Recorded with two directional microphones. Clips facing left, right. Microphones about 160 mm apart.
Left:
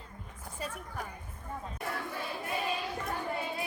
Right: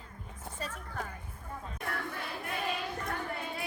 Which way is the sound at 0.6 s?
10° left (ahead or behind).